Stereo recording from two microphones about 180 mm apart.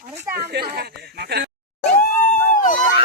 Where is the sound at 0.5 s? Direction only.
60° right (ahead or behind).